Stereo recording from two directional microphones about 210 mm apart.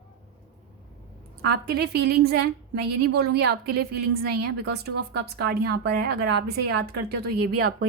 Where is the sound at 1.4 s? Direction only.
50° right (ahead or behind).